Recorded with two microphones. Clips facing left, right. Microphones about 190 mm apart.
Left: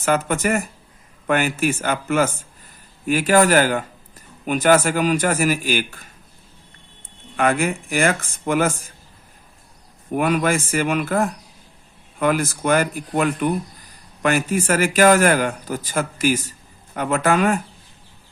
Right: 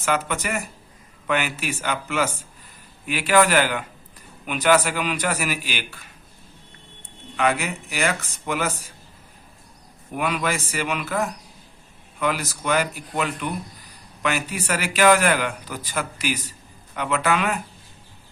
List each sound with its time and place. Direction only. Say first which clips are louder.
0.0 s a man's voice: left 5 dB; 45° left (ahead or behind)
7.3 s a man's voice: left 4 dB; 50° left (ahead or behind)
10.2 s a man's voice: left 6 dB; 45° left (ahead or behind)